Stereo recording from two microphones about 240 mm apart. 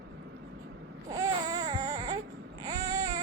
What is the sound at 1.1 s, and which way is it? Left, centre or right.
Baby cry, centre.